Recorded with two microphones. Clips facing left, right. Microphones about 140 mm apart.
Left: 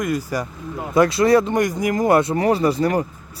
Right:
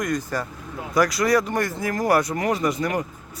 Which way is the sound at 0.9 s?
25° left (ahead or behind).